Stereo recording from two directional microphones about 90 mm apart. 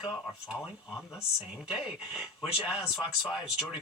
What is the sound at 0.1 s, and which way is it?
A woman's voice, 5° right (ahead or behind).